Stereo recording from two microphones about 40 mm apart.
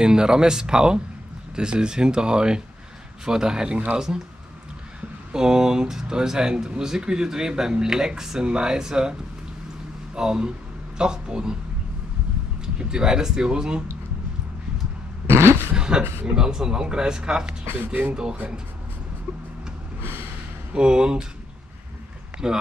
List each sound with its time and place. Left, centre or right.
0.0 s speech: centre
5.3 s a man's voice: centre
10.1 s speech: centre
12.6 s speech: centre
15.2 s a sound: right
15.7 s speech: right
20.7 s speech: right
22.4 s a man's voice: centre